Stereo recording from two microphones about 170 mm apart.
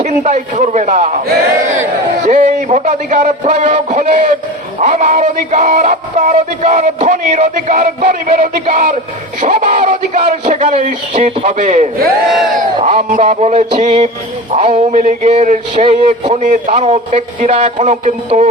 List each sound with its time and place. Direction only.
0.0 s speech: 45° right (ahead or behind)
2.2 s a man's voice: 45° right (ahead or behind)
10.6 s speech: 40° right (ahead or behind)
12.3 s crowd: centre (ahead or behind)
12.5 s speech: 50° right (ahead or behind)